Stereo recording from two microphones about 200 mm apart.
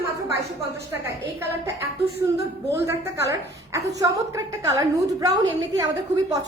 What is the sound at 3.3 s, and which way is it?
A woman's voice, 15° right (ahead or behind).